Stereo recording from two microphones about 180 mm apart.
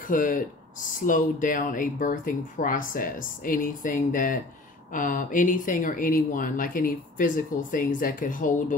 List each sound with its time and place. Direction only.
0.0 s speech: 50° left (ahead or behind)